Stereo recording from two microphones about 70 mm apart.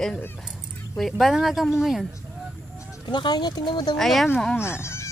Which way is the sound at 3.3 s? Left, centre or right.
Left.